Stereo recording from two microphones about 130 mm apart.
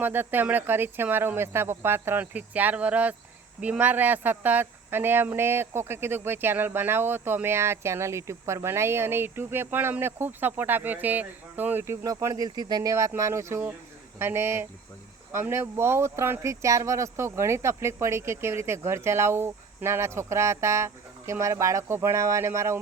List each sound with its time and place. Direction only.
0.0 s speech: 15° right (ahead or behind)